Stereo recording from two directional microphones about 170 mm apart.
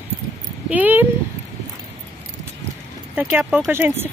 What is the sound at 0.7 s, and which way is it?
Speech, 10° right (ahead or behind).